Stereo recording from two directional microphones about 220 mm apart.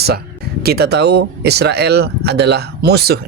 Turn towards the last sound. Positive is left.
turn(degrees=-45)  # may be behind; listen again after turning